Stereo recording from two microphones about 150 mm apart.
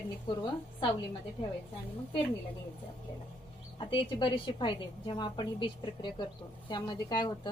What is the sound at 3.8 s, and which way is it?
A woman's voice, 30° left (ahead or behind).